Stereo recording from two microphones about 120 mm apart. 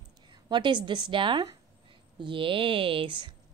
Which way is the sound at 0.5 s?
40° right (ahead or behind).